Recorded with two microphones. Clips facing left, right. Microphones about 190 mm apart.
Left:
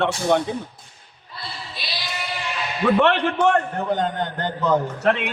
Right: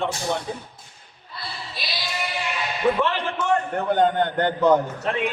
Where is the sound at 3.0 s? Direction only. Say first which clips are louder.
Left 6 dB; 70° left (ahead or behind).